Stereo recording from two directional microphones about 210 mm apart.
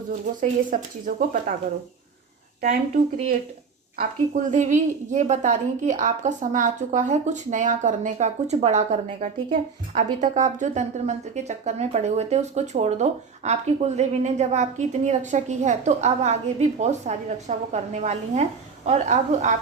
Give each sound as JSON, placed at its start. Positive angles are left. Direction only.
{"t": 0.3, "sound": "a woman's voice", "side_deg": -40}
{"t": 2.6, "sound": "a woman's voice", "side_deg": -40}
{"t": 4.5, "sound": "a woman's voice", "side_deg": -35}